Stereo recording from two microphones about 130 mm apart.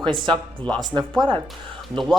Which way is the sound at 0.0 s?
40° right (ahead or behind).